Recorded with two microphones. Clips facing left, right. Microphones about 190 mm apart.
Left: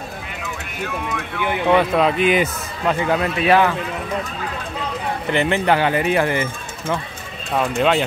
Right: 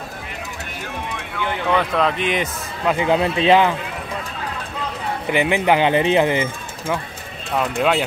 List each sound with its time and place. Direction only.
1.4 s speech: 15° left (ahead or behind)
2.0 s speech: 5° left (ahead or behind)
2.9 s speech: 20° right (ahead or behind)
5.3 s speech: 15° right (ahead or behind)
7.6 s speech: 5° right (ahead or behind)